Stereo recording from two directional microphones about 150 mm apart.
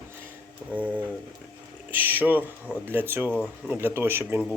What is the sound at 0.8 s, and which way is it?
Speech, 10° right (ahead or behind).